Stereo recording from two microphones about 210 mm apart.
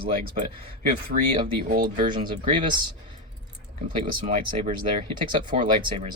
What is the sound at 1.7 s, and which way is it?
Speech, 45° right (ahead or behind).